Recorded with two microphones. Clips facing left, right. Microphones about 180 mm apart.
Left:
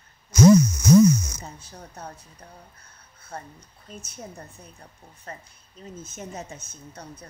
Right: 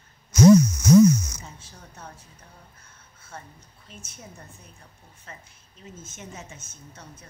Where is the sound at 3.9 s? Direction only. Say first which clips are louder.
Left 6 dB; 40° left (ahead or behind).